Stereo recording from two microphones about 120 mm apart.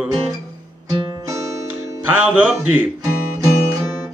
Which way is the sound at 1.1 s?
30° right (ahead or behind).